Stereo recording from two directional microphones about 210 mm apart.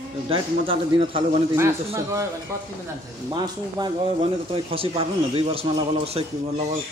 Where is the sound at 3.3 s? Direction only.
20° right (ahead or behind).